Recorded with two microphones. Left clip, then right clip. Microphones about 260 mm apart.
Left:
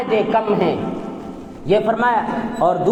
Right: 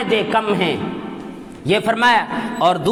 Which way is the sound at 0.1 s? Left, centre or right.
Right.